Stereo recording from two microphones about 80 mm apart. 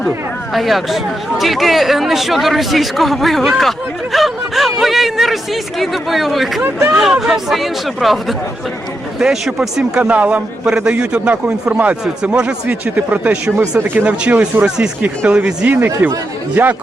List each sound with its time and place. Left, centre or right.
0.5 s a man's voice: centre
13.6 s speech: right